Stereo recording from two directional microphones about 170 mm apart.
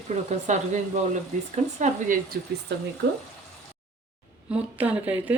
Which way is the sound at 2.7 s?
80° right.